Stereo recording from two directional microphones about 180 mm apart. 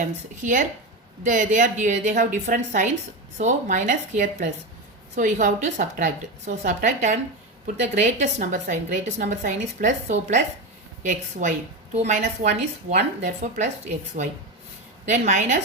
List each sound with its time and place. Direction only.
0.0 s a woman's voice: 45° right (ahead or behind)